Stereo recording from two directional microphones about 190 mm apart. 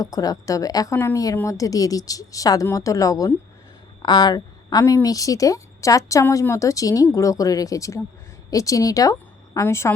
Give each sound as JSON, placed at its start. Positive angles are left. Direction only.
{"t": 0.0, "sound": "a woman's voice", "side_deg": 20}